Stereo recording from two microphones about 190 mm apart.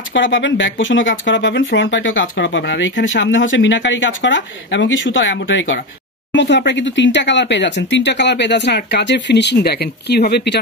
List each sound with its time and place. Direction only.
0.1 s speech: 75° left (ahead or behind)
6.3 s speech: 65° left (ahead or behind)